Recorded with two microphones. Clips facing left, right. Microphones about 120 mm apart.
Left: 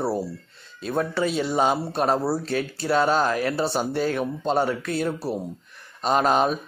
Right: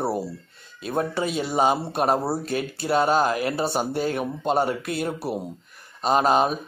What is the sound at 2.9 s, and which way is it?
Speech, 45° right (ahead or behind).